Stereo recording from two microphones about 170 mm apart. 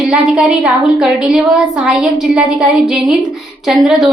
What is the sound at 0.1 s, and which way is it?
A woman's voice, centre (ahead or behind).